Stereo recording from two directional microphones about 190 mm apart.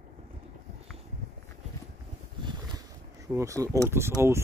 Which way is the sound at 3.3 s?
15° right (ahead or behind).